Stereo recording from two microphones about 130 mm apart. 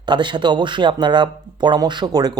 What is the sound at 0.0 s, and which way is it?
Speech, 35° right (ahead or behind).